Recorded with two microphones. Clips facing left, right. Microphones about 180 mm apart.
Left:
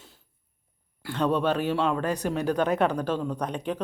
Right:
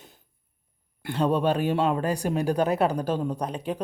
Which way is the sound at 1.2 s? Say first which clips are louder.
Right 1 dB; 10° right (ahead or behind).